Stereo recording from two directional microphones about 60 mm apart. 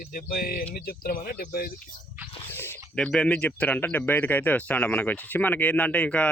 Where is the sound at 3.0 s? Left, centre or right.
Centre.